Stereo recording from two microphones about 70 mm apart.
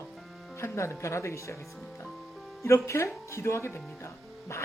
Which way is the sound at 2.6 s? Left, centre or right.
Left.